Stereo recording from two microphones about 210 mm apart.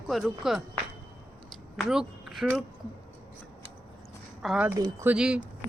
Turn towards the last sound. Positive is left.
turn(degrees=-5)  # may be behind; listen again after turning